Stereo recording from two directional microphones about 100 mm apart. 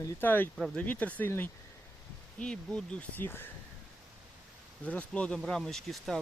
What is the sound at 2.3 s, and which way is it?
Speech, 10° left (ahead or behind).